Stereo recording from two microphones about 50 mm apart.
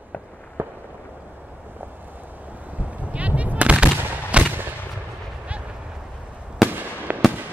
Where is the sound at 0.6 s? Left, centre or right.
Right.